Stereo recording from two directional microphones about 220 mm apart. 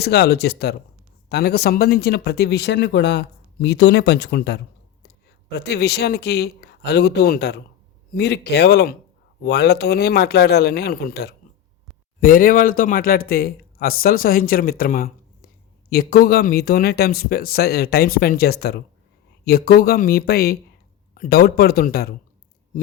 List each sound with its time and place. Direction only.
0.0 s speech: 50° left (ahead or behind)